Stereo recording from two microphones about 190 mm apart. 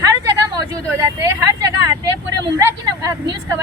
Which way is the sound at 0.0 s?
15° right (ahead or behind).